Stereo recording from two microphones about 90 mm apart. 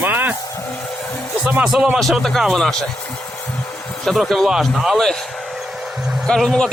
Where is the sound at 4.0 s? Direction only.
5° left (ahead or behind).